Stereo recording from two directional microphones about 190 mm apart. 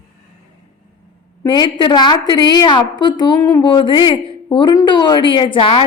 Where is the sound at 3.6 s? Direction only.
25° left (ahead or behind).